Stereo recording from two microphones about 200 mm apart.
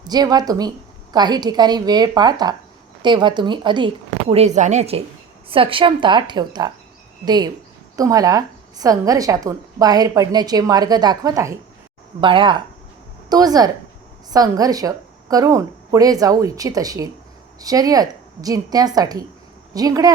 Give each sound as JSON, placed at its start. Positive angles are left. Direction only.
{"t": 0.0, "sound": "a woman's voice", "side_deg": -20}